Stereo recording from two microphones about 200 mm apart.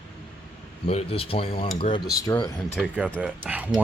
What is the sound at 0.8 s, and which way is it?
Speech, 30° left (ahead or behind).